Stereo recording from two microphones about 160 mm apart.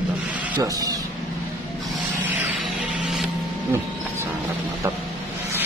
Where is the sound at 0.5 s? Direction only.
25° right (ahead or behind).